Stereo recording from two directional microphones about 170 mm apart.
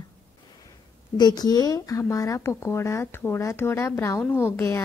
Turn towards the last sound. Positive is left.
turn(degrees=15)  # may be behind; listen again after turning